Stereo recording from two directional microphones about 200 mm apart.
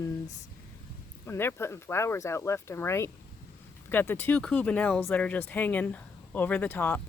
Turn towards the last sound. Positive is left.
turn(degrees=10)  # may be behind; listen again after turning